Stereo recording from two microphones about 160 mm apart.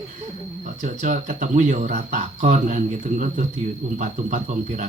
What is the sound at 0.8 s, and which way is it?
Speech, 50° right (ahead or behind).